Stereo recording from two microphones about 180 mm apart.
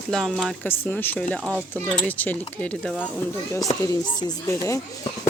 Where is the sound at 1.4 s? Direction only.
5° right (ahead or behind).